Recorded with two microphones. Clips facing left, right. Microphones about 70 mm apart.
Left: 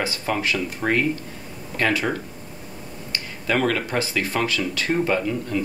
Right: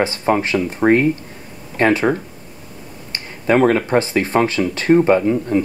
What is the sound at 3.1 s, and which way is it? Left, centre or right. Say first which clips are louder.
Speech: right 8 dB; right.